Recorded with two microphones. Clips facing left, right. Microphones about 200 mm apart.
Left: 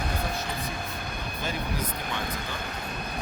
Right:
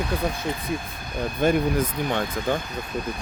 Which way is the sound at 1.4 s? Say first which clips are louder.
Right 12 dB; 55° right (ahead or behind).